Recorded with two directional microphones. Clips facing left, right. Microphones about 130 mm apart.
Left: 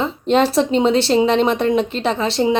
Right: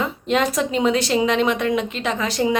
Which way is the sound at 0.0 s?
30° left (ahead or behind).